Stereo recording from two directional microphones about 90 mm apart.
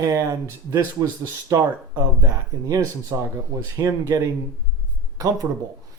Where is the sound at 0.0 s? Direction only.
35° right (ahead or behind).